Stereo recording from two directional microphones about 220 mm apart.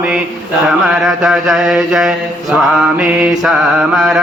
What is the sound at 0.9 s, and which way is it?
Mantra, centre (ahead or behind).